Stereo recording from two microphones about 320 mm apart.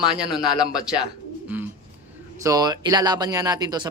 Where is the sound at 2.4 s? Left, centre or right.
Centre.